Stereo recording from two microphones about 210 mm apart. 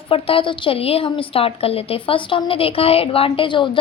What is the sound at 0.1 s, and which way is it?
A woman's voice, 25° left (ahead or behind).